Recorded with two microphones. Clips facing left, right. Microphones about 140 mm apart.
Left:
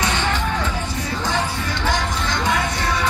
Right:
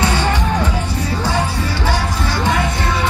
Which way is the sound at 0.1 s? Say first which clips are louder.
Right 4 dB; 10° right (ahead or behind).